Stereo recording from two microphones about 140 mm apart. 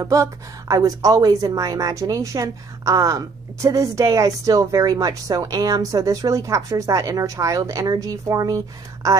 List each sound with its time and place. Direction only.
0.0 s a woman's voice: 25° right (ahead or behind)